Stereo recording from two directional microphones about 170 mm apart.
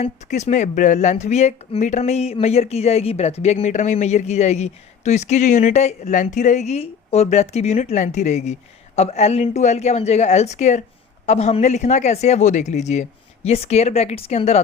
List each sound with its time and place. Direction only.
0.0 s speech: 40° left (ahead or behind)